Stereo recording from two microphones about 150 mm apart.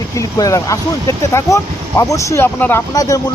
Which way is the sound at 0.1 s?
20° left (ahead or behind).